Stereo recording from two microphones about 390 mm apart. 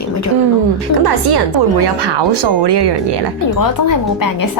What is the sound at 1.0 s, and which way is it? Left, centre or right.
Speech, right.